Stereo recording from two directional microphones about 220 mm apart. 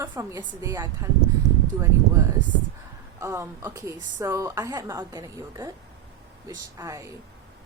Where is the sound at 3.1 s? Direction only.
15° right (ahead or behind).